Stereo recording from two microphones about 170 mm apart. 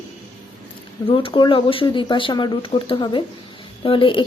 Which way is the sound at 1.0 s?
30° left (ahead or behind).